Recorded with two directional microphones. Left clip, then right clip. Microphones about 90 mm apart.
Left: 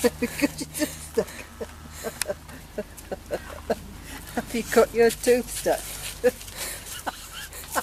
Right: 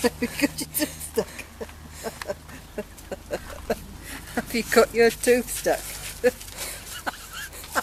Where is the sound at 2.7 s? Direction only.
40° right (ahead or behind).